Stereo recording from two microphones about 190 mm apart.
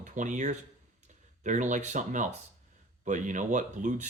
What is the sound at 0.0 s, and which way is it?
Speech, 40° right (ahead or behind).